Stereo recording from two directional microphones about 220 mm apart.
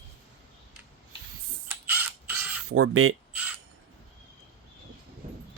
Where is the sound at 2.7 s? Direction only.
70° right (ahead or behind).